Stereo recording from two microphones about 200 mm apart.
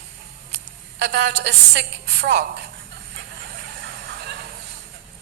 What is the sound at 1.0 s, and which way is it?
A woman's voice, 55° right (ahead or behind).